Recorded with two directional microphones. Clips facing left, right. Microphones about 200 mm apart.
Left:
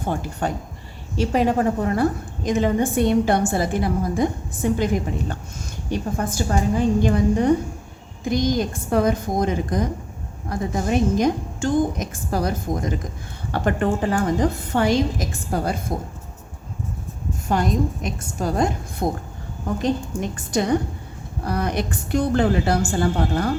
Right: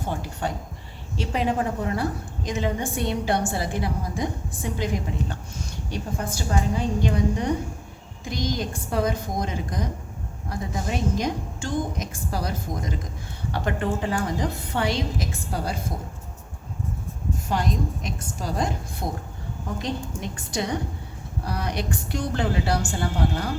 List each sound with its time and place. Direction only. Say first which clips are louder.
0.1 s a woman's voice: left 5 dB; 50° left (ahead or behind)
6.1 s a woman's voice: left 2 dB; 50° left (ahead or behind)
17.5 s a woman's voice: left 5 dB; 50° left (ahead or behind)
20.3 s a woman's voice: left 8 dB; 50° left (ahead or behind)